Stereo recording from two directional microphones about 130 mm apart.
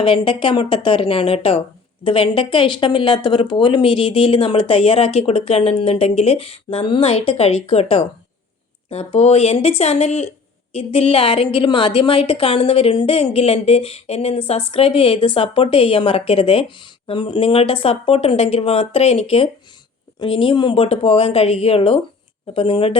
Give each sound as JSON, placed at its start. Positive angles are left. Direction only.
{"t": 0.0, "sound": "a woman's voice", "side_deg": 45}